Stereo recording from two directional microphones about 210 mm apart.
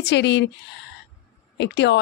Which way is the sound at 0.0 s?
55° left (ahead or behind).